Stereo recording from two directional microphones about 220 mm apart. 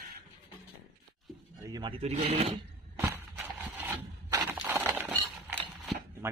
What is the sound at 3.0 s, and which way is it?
Walk, 10° right (ahead or behind).